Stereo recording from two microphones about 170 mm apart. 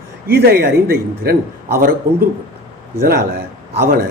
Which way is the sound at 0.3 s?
70° right (ahead or behind).